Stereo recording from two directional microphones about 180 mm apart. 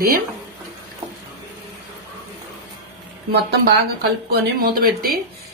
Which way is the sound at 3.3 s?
60° right (ahead or behind).